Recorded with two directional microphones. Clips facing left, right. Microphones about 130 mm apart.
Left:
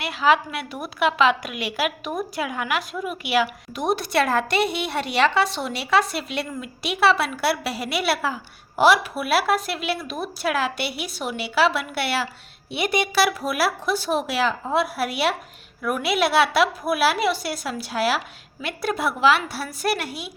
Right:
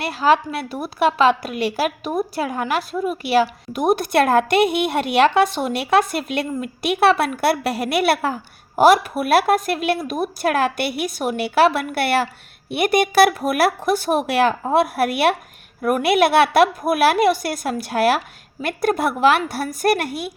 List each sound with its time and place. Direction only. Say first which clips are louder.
0.0 s a woman's voice: right 3 dB; 40° right (ahead or behind)
3.7 s a woman's voice: right 5 dB; 50° right (ahead or behind)